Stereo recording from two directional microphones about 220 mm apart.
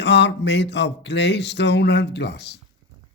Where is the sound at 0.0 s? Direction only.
50° left (ahead or behind).